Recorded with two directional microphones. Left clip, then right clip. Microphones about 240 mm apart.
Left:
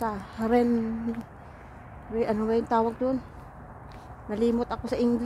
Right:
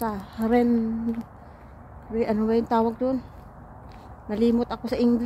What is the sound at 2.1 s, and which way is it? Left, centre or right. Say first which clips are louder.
A woman's voice: right 2 dB; centre.